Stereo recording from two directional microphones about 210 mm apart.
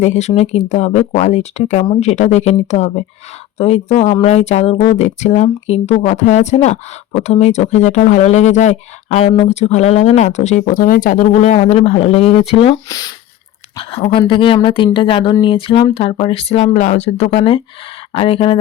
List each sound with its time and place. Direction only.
0.0 s speech: 30° left (ahead or behind)